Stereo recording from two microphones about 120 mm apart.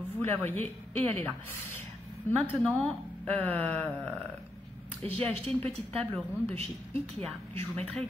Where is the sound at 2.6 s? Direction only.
10° left (ahead or behind).